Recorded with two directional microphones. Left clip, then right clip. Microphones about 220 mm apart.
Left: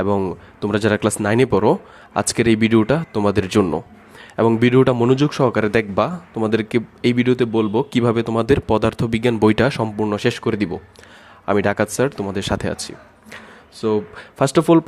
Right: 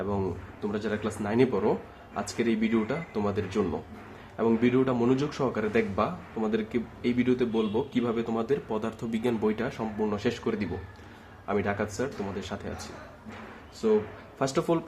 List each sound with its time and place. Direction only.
0.0 s speech: 45° left (ahead or behind)
13.8 s speech: 45° left (ahead or behind)